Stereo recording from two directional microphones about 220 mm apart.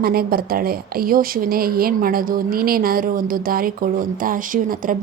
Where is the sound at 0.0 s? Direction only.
45° right (ahead or behind).